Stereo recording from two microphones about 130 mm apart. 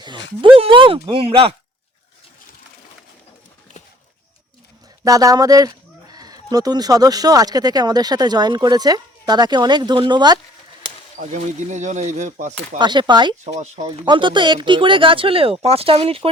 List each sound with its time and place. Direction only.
0.0 s speech: 40° right (ahead or behind)
5.0 s speech: 25° right (ahead or behind)
11.2 s speech: 70° right (ahead or behind)
12.8 s speech: 35° right (ahead or behind)
13.4 s speech: 65° right (ahead or behind)
14.0 s speech: 35° right (ahead or behind)